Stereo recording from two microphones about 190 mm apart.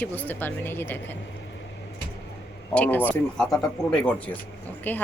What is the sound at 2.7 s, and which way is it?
A woman's voice, 10° left (ahead or behind).